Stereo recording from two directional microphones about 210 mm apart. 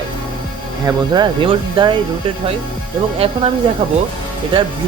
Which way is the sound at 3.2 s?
25° right (ahead or behind).